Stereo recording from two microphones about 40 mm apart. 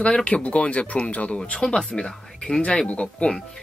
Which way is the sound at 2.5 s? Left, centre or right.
Left.